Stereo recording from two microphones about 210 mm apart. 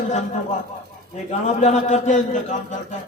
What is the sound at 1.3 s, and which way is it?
A man's voice, 35° left (ahead or behind).